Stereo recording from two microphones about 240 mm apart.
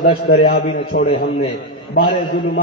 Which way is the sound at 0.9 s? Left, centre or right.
Left.